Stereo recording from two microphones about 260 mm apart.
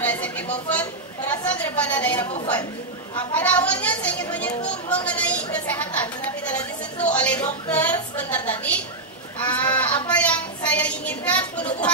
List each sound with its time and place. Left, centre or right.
0.0 s chatter: centre
1.5 s a woman's voice: centre
2.1 s a woman's voice: left
3.3 s a woman's voice: centre